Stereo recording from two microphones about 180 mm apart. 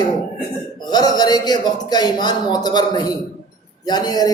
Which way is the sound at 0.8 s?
20° left (ahead or behind).